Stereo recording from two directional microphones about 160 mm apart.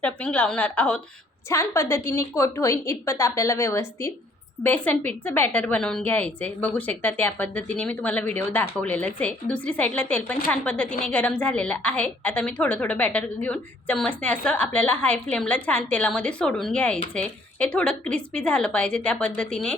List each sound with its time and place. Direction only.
0.0 s a woman's voice: 10° left (ahead or behind)